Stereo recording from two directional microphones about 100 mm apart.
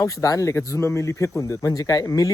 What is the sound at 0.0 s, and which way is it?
Speech, 35° left (ahead or behind).